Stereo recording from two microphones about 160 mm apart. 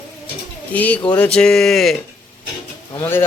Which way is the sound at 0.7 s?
10° left (ahead or behind).